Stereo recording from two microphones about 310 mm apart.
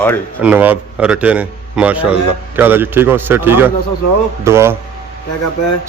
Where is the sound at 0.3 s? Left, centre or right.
Centre.